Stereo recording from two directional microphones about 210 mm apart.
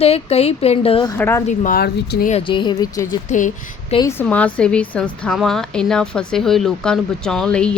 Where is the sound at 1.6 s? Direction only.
45° left (ahead or behind).